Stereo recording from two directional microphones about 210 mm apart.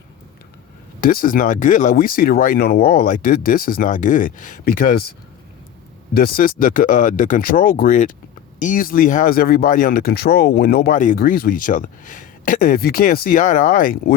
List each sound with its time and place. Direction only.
1.0 s speech: 40° left (ahead or behind)
6.1 s speech: 45° left (ahead or behind)